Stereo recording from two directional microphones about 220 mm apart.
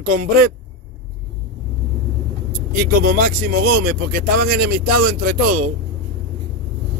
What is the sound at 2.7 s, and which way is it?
Speech, 40° right (ahead or behind).